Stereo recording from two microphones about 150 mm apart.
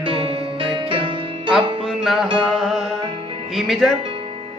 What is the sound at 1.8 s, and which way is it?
Music, centre (ahead or behind).